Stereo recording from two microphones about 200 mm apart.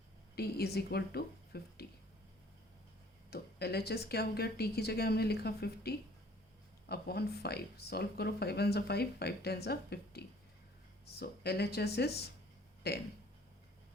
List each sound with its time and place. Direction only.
0.3 s speech: 50° left (ahead or behind)
3.2 s speech: 55° left (ahead or behind)